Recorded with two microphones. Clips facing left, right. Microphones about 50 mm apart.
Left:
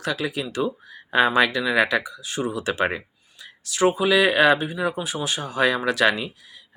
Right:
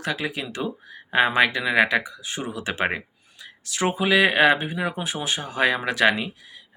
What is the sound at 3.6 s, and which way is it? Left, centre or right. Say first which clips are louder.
Speech: left 3 dB; right.